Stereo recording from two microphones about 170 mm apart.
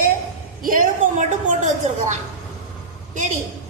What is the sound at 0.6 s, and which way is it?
A woman's voice, 55° right (ahead or behind).